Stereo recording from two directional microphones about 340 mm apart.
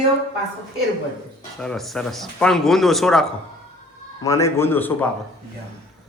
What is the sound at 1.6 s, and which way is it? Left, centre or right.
Speech, centre.